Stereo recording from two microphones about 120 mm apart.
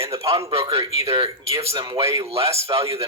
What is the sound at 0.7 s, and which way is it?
Speech, 25° right (ahead or behind).